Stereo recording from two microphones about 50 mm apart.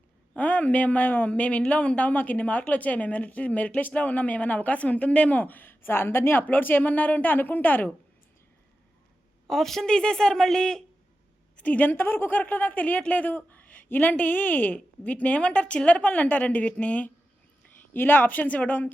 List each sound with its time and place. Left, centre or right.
0.3 s speech: left
1.3 s speech: left
9.5 s a woman's voice: centre
11.5 s speech: left
17.9 s speech: left